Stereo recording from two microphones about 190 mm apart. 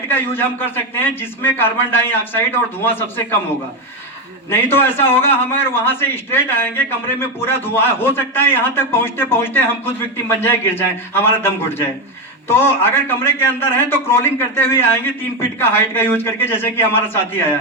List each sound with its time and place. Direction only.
0.1 s a man's voice: 10° left (ahead or behind)
4.4 s a man's voice: 10° left (ahead or behind)